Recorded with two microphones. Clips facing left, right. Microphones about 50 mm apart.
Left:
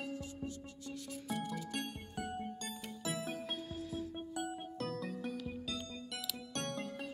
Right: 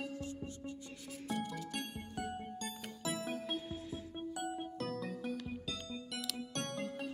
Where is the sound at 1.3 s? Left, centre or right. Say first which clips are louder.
Even; centre.